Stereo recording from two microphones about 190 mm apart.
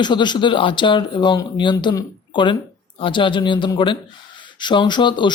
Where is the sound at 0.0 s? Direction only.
25° left (ahead or behind).